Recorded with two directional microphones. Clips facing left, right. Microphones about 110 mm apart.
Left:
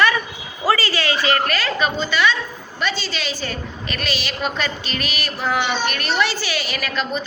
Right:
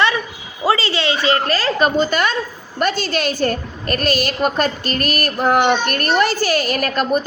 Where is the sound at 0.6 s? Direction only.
25° right (ahead or behind).